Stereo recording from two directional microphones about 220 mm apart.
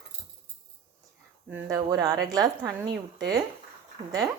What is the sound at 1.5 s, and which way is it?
A woman's voice, 5° right (ahead or behind).